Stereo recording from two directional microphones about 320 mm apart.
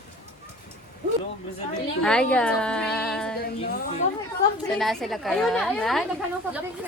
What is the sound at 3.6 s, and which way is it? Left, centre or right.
Speech, left.